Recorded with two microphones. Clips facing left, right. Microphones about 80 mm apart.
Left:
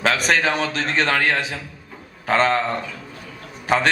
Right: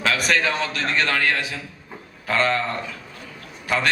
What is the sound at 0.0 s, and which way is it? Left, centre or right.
A man's voice, left.